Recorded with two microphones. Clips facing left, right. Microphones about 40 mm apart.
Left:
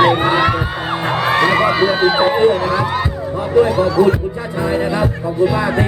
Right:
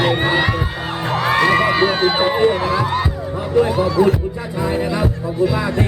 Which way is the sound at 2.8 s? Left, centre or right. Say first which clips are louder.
Left 1 dB; centre.